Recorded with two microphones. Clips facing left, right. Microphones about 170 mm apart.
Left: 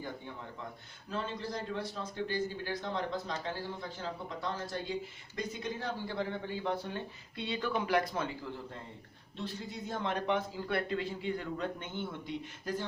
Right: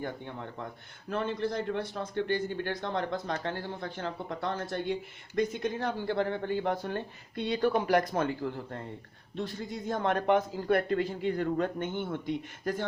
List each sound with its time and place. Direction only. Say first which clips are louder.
1.1 s a man's voice: right 6 dB; 60° right (ahead or behind)